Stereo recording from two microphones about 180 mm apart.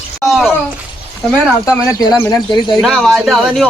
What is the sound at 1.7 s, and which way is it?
Speech, 20° left (ahead or behind).